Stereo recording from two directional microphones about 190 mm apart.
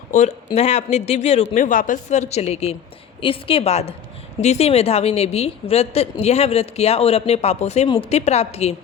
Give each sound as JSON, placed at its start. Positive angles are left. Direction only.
{"t": 0.1, "sound": "a woman's voice", "side_deg": 35}